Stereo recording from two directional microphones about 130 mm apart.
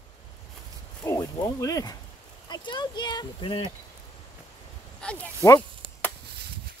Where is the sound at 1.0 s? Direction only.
25° left (ahead or behind).